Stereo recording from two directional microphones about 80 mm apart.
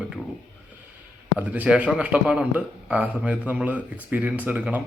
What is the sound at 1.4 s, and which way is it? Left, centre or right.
A man's voice, centre.